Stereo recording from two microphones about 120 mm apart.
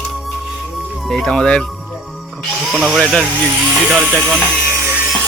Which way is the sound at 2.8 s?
Centre (ahead or behind).